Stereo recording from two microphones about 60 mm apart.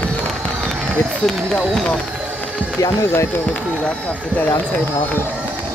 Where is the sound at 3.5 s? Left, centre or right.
Centre.